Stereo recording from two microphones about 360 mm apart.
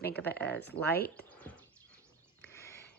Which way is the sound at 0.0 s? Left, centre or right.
Left.